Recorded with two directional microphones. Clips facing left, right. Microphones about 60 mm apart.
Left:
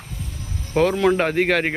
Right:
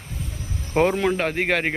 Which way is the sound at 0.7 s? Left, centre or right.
Right.